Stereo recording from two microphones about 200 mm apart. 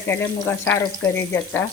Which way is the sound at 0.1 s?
10° left (ahead or behind).